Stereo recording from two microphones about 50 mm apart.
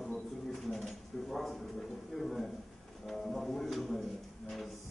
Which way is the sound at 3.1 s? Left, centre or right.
Centre.